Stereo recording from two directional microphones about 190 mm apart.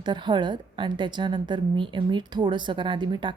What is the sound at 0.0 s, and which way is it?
A woman's voice, 25° right (ahead or behind).